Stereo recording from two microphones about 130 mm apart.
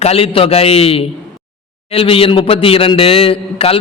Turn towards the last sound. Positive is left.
turn(degrees=45)  # may be behind; listen again after turning